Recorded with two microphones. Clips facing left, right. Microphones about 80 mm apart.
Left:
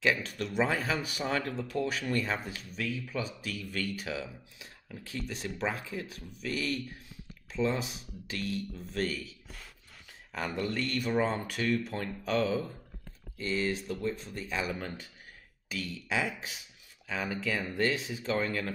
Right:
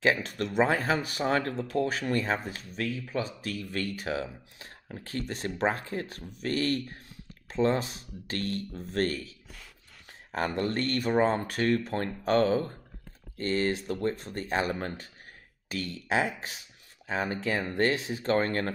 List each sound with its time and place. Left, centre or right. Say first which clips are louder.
0.0 s speech: right 3 dB; right
10.3 s speech: right 4 dB; right
11.1 s speech: right 5 dB; right